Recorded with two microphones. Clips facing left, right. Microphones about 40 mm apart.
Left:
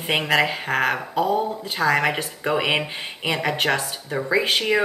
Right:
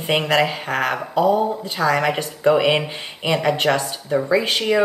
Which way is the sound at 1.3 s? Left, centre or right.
Centre.